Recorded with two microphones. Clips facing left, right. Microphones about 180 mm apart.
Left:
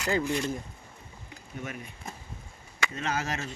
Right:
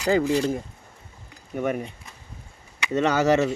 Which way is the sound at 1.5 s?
60° right (ahead or behind).